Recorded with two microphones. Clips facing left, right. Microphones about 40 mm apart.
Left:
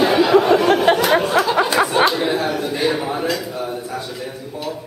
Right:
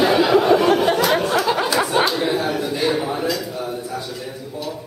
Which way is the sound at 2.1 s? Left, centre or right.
Centre.